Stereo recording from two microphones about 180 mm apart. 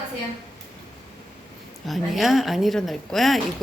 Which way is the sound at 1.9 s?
Centre (ahead or behind).